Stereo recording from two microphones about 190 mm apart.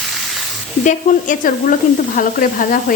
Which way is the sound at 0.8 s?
40° left (ahead or behind).